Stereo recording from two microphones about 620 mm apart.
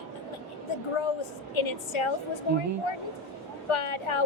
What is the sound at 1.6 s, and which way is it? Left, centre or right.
Speech, left.